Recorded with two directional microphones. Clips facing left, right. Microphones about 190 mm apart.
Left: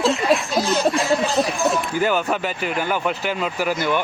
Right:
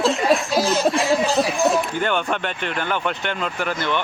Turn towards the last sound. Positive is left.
turn(degrees=10)  # may be behind; listen again after turning